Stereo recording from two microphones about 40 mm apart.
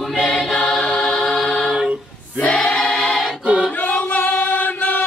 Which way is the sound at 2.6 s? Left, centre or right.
Centre.